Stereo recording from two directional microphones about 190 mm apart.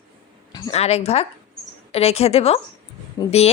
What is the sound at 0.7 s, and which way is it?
Speech, 35° left (ahead or behind).